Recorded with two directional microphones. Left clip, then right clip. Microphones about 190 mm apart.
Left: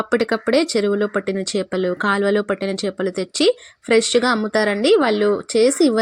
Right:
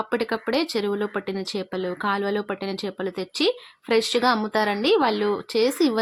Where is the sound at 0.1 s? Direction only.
20° left (ahead or behind).